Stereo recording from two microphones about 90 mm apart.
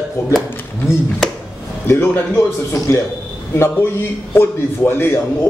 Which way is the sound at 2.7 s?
30° left (ahead or behind).